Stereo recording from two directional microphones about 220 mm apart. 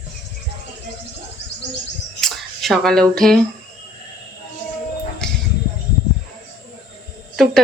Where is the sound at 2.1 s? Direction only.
Centre (ahead or behind).